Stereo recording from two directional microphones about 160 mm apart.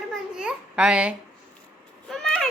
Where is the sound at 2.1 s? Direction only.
Centre (ahead or behind).